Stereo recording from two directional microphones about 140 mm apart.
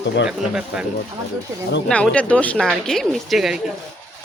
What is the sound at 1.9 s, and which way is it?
Speech, 10° left (ahead or behind).